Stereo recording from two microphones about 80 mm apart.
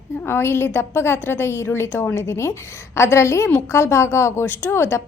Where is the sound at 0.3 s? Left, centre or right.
Left.